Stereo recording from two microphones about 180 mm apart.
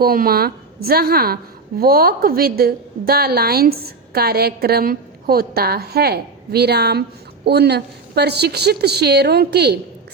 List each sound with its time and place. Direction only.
0.0 s a woman's voice: 55° right (ahead or behind)